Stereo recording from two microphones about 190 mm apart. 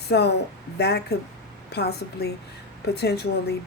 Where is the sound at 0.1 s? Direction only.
60° left (ahead or behind).